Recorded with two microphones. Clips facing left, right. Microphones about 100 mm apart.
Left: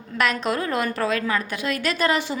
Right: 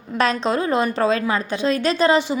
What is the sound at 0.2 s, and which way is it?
A woman's voice, 30° right (ahead or behind).